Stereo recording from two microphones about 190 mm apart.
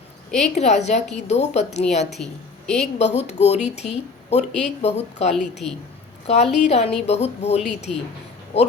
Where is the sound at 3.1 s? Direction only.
35° left (ahead or behind).